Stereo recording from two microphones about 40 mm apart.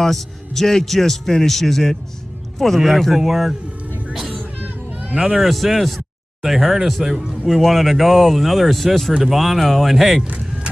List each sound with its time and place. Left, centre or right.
0.0 s a man's voice: centre
5.1 s speech: centre
5.4 s speech: centre